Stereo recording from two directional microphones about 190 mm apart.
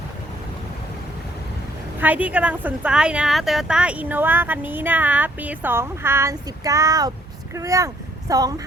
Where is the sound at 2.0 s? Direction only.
10° right (ahead or behind).